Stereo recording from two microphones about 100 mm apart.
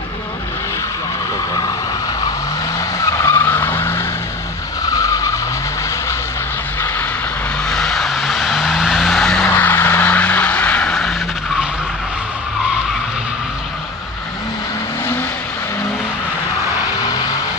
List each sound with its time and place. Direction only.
3.1 s vehicle: 30° left (ahead or behind)
4.8 s vehicle: 35° left (ahead or behind)
7.6 s vehicle: 5° left (ahead or behind)
9.4 s vehicle: 20° left (ahead or behind); by 11.1 s 5° left (ahead or behind)